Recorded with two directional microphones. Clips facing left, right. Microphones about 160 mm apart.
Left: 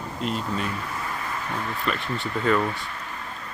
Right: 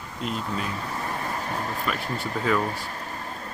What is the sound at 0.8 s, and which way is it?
Vehicle, 35° right (ahead or behind).